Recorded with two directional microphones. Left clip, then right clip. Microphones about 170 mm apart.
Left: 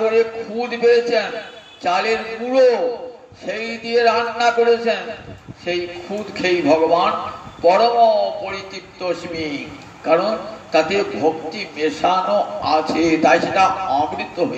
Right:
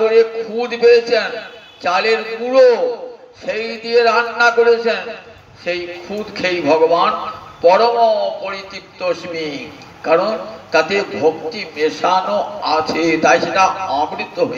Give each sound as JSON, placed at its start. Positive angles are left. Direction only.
{"t": 0.0, "sound": "a man's voice", "side_deg": -40}
{"t": 6.3, "sound": "a man's voice", "side_deg": -40}